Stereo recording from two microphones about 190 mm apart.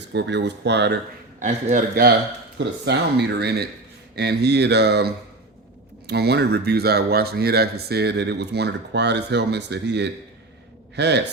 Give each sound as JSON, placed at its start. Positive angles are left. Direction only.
{"t": 0.1, "sound": "speech", "side_deg": -65}
{"t": 1.4, "sound": "a man's voice", "side_deg": -40}
{"t": 2.6, "sound": "speech", "side_deg": -60}